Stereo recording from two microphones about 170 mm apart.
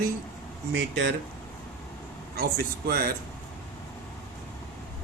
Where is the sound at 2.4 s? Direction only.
65° right (ahead or behind).